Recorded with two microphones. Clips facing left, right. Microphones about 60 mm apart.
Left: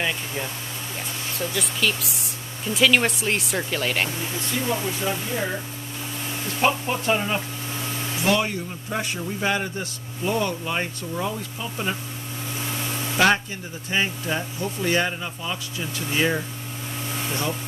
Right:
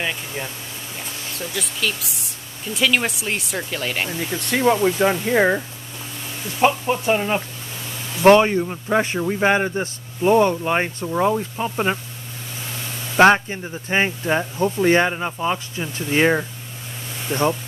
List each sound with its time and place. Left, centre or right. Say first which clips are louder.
1.3 s speech: left 1 dB; centre
4.5 s speech: right 10 dB; right
6.6 s speech: right 4 dB; centre
8.2 s a man's voice: right 11 dB; right
13.2 s a man's voice: right 7 dB; right